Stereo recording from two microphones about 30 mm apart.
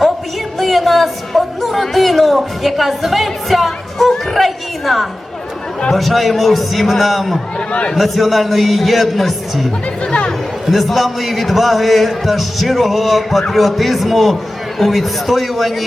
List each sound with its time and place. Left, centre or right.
0.6 s a sound: centre
4.4 s chatter: centre
5.9 s a man's voice: centre
7.7 s a man's voice: left
7.9 s a man's voice: centre
10.7 s a man's voice: centre